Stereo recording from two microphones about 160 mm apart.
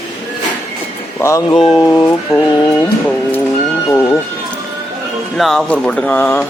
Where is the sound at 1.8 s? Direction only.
20° left (ahead or behind).